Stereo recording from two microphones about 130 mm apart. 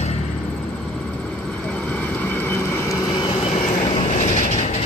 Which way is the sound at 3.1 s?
40° left (ahead or behind).